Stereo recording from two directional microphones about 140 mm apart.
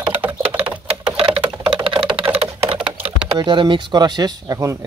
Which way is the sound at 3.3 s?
35° right (ahead or behind).